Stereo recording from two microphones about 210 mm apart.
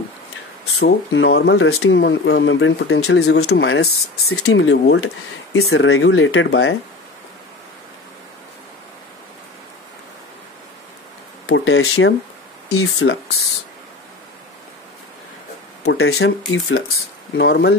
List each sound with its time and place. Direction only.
0.8 s speech: 65° left (ahead or behind)
5.6 s speech: 80° left
11.4 s speech: 65° left (ahead or behind); by 13.1 s 80° left
15.8 s speech: 65° left (ahead or behind)
16.5 s speech: 80° left
17.4 s speech: 55° left (ahead or behind)